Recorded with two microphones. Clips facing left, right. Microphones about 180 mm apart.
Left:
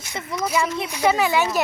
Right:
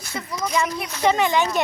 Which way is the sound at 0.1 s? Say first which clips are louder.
Even; 25° left (ahead or behind).